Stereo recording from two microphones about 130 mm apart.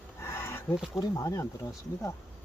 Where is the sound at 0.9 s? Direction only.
25° left (ahead or behind).